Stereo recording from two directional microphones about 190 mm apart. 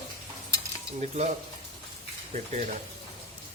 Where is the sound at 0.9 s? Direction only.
35° right (ahead or behind).